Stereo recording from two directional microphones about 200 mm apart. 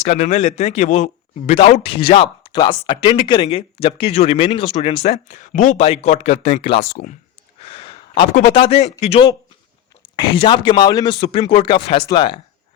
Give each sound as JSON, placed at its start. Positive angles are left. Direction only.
{"t": 0.0, "sound": "a man's voice", "side_deg": 35}
{"t": 7.6, "sound": "a sound", "side_deg": 30}
{"t": 8.3, "sound": "a man's voice", "side_deg": 35}